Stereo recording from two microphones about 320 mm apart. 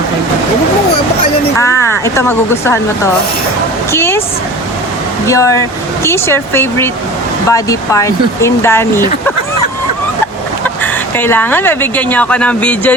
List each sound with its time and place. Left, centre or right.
2.0 s speech: centre
5.3 s speech: centre
11.2 s speech: centre